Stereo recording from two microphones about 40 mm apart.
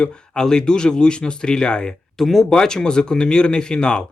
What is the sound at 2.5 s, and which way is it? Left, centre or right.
Speech, centre.